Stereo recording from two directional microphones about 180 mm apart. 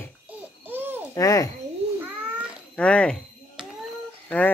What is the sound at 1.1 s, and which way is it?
Speech, 20° left (ahead or behind).